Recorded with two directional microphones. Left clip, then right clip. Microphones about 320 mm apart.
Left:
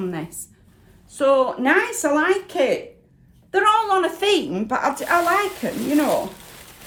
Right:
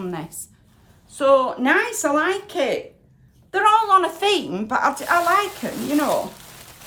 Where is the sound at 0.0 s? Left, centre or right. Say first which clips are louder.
Left 2 dB; centre.